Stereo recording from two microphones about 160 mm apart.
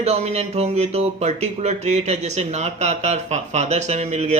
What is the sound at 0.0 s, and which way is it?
Speech, 45° right (ahead or behind).